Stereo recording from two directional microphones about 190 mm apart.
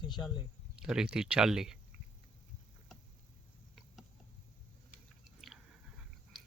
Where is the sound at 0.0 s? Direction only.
25° left (ahead or behind).